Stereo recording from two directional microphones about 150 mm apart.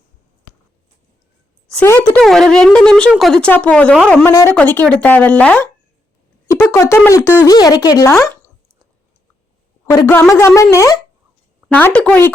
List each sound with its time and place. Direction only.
1.7 s speech: 15° left (ahead or behind)
4.3 s speech: 20° left (ahead or behind)
6.7 s speech: 15° left (ahead or behind)
10.3 s speech: 20° left (ahead or behind)
11.7 s speech: 10° left (ahead or behind)